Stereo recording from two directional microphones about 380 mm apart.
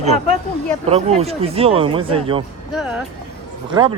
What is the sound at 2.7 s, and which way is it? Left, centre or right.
Speech, centre.